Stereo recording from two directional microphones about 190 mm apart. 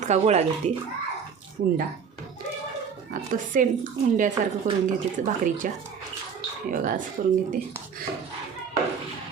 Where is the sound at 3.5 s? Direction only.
45° right (ahead or behind).